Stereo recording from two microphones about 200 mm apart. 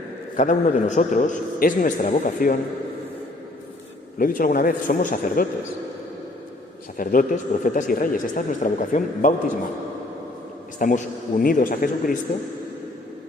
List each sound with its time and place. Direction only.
0.3 s a man's voice: 40° left (ahead or behind)
4.2 s speech: 45° left (ahead or behind)
6.9 s speech: 45° left (ahead or behind)
10.8 s speech: 40° left (ahead or behind)